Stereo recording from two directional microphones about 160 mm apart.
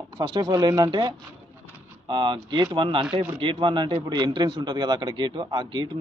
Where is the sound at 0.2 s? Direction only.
25° right (ahead or behind).